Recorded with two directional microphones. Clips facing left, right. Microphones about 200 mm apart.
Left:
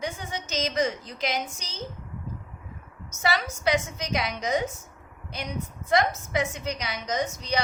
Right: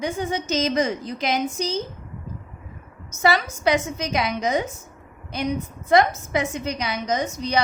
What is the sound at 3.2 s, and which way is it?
A woman's voice, 55° right (ahead or behind).